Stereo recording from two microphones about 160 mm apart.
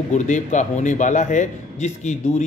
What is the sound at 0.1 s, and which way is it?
A man's voice, 50° left (ahead or behind).